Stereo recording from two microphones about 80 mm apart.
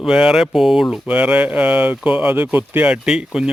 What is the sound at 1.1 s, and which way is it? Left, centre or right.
Speech, centre.